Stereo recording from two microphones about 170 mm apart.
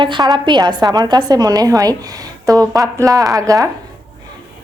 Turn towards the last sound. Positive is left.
turn(degrees=-20)  # may be behind; listen again after turning